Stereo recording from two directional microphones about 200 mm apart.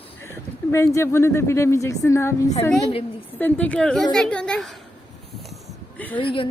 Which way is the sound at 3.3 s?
10° left (ahead or behind).